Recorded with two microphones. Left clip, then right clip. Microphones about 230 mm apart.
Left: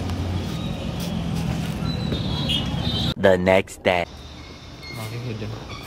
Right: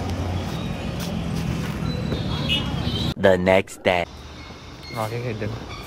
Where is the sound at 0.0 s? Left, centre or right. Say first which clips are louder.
Right 1 dB; centre.